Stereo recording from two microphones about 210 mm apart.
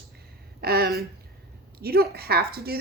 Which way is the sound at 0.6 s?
50° right (ahead or behind).